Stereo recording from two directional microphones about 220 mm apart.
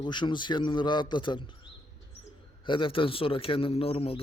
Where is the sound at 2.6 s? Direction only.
20° left (ahead or behind).